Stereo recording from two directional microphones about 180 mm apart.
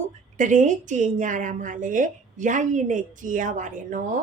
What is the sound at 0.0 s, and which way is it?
Speech, 45° right (ahead or behind).